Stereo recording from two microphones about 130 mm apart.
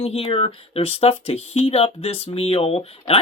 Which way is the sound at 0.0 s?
50° left (ahead or behind).